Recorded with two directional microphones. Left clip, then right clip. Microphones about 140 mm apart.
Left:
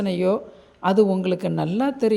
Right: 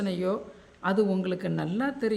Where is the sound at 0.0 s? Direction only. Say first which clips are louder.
Left 8 dB; 30° left (ahead or behind).